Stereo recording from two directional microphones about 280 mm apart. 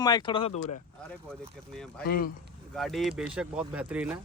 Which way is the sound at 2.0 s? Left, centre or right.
Left.